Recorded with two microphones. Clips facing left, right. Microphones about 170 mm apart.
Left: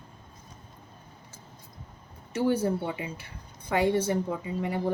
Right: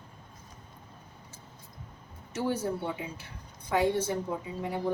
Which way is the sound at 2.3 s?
60° left (ahead or behind).